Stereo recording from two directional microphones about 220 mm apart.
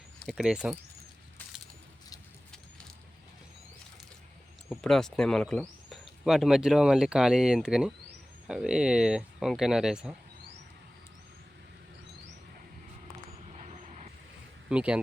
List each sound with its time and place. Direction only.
0.2 s speech: centre (ahead or behind)
4.7 s speech: centre (ahead or behind)
13.6 s vehicle: 30° right (ahead or behind)
14.7 s speech: 5° right (ahead or behind)